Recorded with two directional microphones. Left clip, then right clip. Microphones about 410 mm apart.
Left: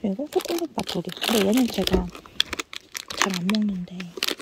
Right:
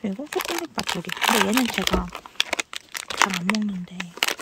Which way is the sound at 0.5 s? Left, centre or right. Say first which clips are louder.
Right 1 dB; centre.